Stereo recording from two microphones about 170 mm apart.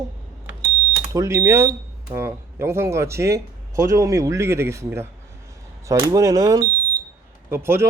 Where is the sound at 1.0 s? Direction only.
20° right (ahead or behind).